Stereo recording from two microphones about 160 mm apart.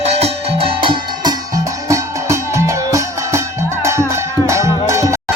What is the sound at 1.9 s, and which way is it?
Music, 20° right (ahead or behind).